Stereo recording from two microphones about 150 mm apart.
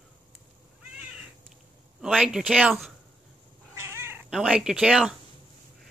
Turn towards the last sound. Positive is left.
turn(degrees=-5)  # may be behind; listen again after turning